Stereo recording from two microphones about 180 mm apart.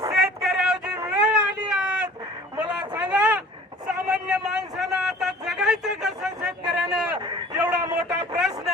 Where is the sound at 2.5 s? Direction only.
5° right (ahead or behind).